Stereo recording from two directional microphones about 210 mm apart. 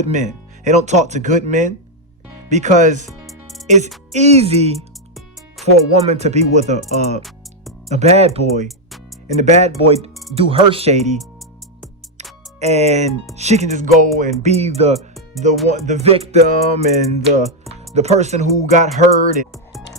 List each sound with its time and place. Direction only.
0.0 s music: 35° right (ahead or behind)
3.1 s music: centre (ahead or behind)
4.1 s music: 30° right (ahead or behind)
6.1 s music: 30° right (ahead or behind)
10.3 s speech: 25° right (ahead or behind)
12.5 s music: 30° right (ahead or behind)